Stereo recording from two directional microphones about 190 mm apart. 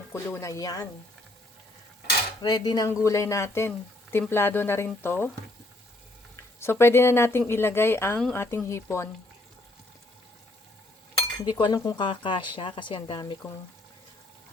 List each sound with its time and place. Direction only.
0.1 s speech: 15° left (ahead or behind)
2.4 s speech: 20° left (ahead or behind)
6.3 s speech: 15° left (ahead or behind)
11.3 s speech: 25° left (ahead or behind)